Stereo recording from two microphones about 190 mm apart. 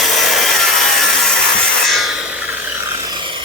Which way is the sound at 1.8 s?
Centre (ahead or behind).